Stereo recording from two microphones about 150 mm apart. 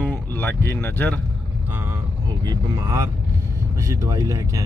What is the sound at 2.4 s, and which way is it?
Speech, 25° right (ahead or behind).